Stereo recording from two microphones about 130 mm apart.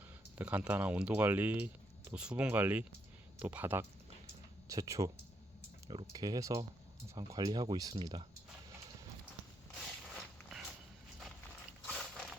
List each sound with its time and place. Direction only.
0.3 s speech: 10° right (ahead or behind)
4.7 s speech: 25° right (ahead or behind)
11.9 s mechanisms: 5° left (ahead or behind)